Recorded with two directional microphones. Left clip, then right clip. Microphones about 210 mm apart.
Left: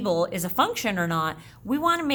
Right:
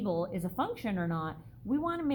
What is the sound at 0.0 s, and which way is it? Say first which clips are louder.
A woman's voice: left 9 dB; 20° left (ahead or behind).